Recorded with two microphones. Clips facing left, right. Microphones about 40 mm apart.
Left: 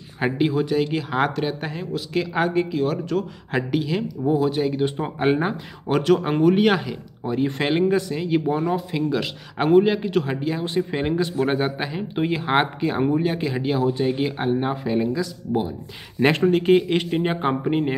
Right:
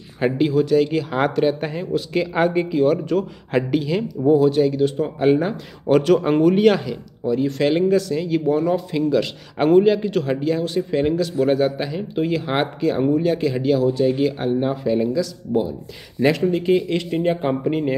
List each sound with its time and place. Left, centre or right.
0.2 s speech: centre
4.7 s speech: left
5.9 s speech: centre
7.2 s speech: left; by 10.6 s centre
10.6 s speech: left
16.2 s speech: left
17.1 s speech: left